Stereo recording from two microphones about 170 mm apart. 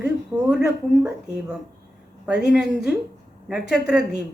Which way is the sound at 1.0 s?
5° right (ahead or behind).